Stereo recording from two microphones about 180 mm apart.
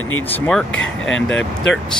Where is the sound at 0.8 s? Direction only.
90° left.